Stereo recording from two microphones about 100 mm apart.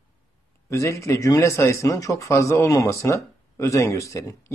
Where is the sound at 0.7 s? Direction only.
30° left (ahead or behind).